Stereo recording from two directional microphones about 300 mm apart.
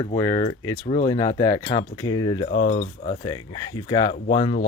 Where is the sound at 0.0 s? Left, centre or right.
Centre.